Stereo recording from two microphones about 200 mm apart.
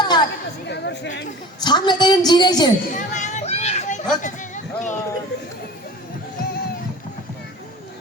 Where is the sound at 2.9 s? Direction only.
35° left (ahead or behind).